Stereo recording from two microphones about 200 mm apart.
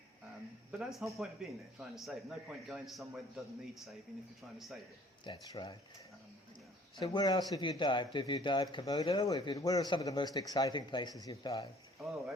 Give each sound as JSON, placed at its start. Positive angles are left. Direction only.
{"t": 0.9, "sound": "a man's voice", "side_deg": 0}
{"t": 4.5, "sound": "a man's voice", "side_deg": 0}
{"t": 5.2, "sound": "speech", "side_deg": 20}
{"t": 7.0, "sound": "speech", "side_deg": 20}